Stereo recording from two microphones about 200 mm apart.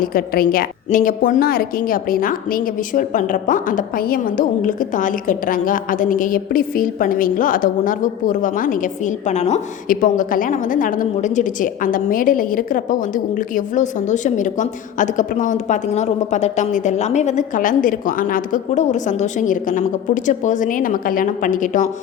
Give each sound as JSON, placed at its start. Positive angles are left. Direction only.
{"t": 0.0, "sound": "a woman's voice", "side_deg": 45}